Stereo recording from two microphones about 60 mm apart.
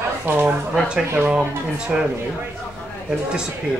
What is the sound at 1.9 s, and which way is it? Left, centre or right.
Speech, centre.